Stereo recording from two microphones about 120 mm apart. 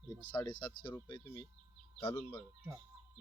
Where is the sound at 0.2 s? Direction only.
40° left (ahead or behind).